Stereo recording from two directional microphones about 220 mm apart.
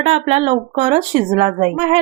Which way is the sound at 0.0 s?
25° right (ahead or behind).